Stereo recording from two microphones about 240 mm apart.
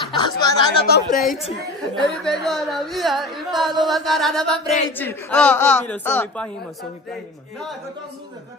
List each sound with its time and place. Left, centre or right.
0.2 s speech: centre
0.8 s a woman's voice: left
2.0 s a man's voice: centre